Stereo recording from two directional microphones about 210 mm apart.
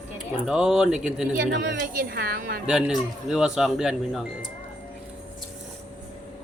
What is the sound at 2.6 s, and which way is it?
Speech, centre (ahead or behind).